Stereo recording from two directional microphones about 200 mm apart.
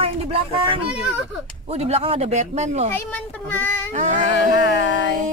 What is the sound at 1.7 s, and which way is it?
Speech, 30° right (ahead or behind).